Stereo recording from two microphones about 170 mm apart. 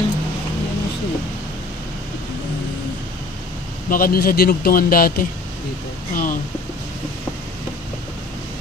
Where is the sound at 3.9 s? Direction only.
60° left (ahead or behind).